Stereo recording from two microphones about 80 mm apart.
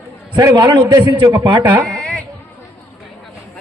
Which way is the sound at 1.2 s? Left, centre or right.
Right.